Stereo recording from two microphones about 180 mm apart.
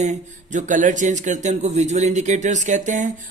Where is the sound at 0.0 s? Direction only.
40° right (ahead or behind).